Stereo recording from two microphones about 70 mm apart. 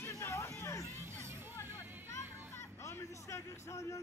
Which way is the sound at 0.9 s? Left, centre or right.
Right.